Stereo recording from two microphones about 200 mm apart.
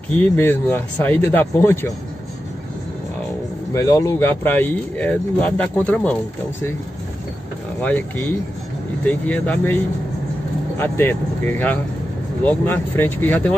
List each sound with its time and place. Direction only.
0.1 s speech: 10° left (ahead or behind)
3.7 s speech: 15° left (ahead or behind)
7.8 s speech: 10° left (ahead or behind)
10.8 s speech: 10° left (ahead or behind)